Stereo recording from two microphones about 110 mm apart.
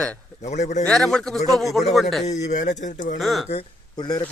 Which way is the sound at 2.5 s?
90° left.